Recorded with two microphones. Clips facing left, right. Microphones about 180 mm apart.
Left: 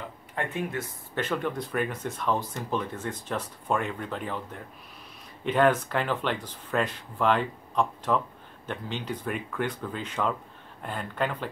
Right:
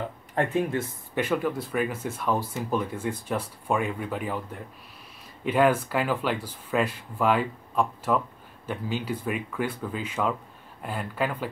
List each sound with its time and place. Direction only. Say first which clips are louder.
0.3 s speech: right 6 dB; 40° right (ahead or behind)
1.1 s speech: right 3 dB; 10° right (ahead or behind)